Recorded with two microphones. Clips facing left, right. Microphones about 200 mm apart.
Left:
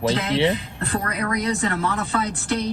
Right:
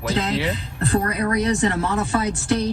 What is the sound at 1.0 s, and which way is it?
Speech, 30° right (ahead or behind).